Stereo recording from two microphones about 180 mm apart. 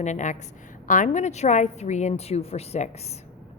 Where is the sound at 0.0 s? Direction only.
40° left (ahead or behind).